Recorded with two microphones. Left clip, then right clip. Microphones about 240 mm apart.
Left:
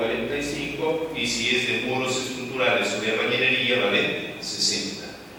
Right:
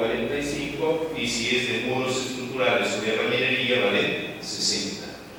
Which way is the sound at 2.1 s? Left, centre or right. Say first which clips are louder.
Even; centre.